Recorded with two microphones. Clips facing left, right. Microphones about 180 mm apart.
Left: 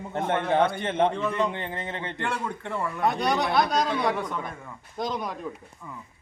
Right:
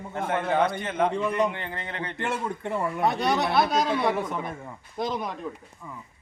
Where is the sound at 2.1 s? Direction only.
20° right (ahead or behind).